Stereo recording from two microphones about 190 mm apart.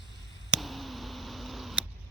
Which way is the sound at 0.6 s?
Centre (ahead or behind).